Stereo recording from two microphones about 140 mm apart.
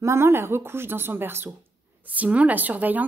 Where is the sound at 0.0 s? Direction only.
20° right (ahead or behind).